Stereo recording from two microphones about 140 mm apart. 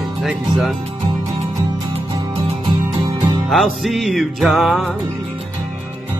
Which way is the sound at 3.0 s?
30° right (ahead or behind).